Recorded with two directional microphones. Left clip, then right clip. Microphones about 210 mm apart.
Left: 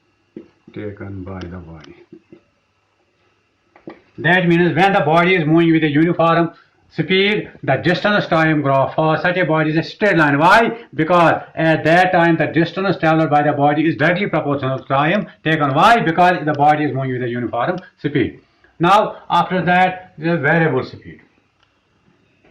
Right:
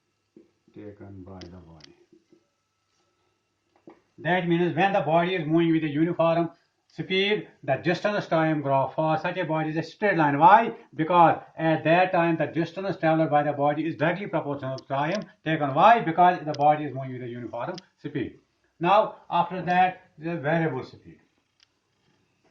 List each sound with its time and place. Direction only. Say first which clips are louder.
0.7 s speech: left 14 dB; 30° right (ahead or behind)
4.2 s speech: left 10 dB; 35° right (ahead or behind)
19.5 s a man's voice: left 8 dB; 45° right (ahead or behind)